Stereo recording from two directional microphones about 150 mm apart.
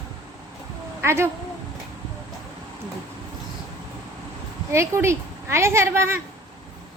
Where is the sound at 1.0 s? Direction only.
15° right (ahead or behind).